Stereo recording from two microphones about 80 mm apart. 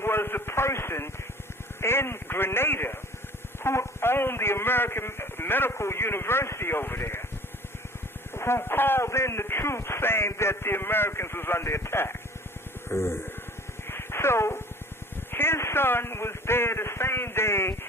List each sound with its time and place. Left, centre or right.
0.0 s radio: left
1.8 s a man's voice: left
8.3 s speech: left
13.8 s a sound: left
15.3 s radio: left